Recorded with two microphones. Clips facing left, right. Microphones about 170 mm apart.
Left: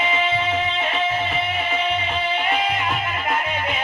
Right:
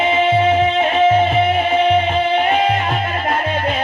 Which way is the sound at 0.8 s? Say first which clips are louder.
Right 10 dB; 45° right (ahead or behind).